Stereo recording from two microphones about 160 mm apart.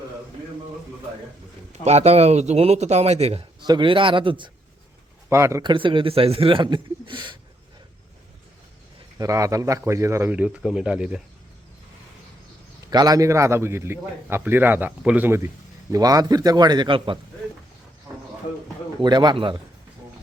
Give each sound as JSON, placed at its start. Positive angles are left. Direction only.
{"t": 1.8, "sound": "a man's voice", "side_deg": -40}
{"t": 3.6, "sound": "a man's voice", "side_deg": -30}
{"t": 5.3, "sound": "a man's voice", "side_deg": -15}
{"t": 5.7, "sound": "a man's voice", "side_deg": -30}
{"t": 9.1, "sound": "a man's voice", "side_deg": -20}
{"t": 12.9, "sound": "a man's voice", "side_deg": -25}
{"t": 19.0, "sound": "a man's voice", "side_deg": -25}